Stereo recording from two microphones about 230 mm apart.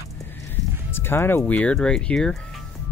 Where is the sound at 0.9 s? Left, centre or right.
Centre.